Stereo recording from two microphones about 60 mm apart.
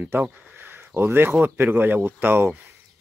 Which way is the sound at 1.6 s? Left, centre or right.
Right.